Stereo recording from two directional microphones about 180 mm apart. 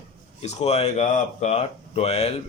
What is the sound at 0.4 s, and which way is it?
Speech, 35° left (ahead or behind).